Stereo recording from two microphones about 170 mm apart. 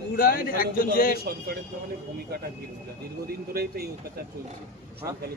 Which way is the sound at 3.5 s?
65° right (ahead or behind).